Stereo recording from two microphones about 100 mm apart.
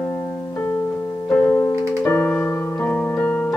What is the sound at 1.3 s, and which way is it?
Keyboard, 15° left (ahead or behind).